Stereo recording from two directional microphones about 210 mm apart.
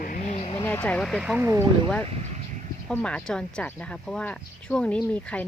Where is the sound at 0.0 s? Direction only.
35° left (ahead or behind).